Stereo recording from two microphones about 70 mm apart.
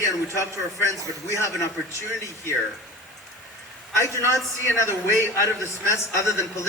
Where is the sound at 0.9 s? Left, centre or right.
Left.